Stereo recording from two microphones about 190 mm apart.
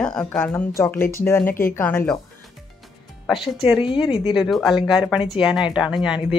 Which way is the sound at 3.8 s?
25° left (ahead or behind).